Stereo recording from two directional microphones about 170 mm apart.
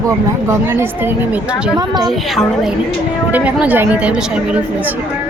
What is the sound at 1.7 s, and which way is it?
Speech, 25° right (ahead or behind).